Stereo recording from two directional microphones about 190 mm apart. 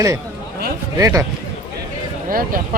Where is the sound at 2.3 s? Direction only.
50° right (ahead or behind).